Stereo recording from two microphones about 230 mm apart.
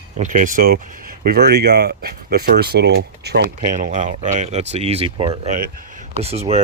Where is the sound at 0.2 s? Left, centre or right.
Right.